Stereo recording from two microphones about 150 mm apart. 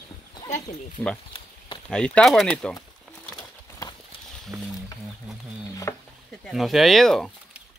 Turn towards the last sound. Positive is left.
turn(degrees=0)  # may be behind; listen again after turning